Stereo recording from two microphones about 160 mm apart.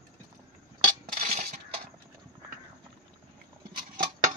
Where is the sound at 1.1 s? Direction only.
50° right (ahead or behind).